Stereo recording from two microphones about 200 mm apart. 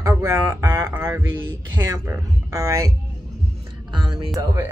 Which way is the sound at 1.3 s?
75° right (ahead or behind).